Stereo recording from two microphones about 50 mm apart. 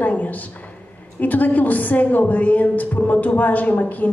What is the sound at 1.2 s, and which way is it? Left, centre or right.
A woman's voice, left.